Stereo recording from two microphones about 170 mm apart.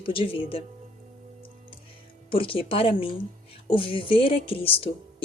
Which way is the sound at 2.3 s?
30° left (ahead or behind).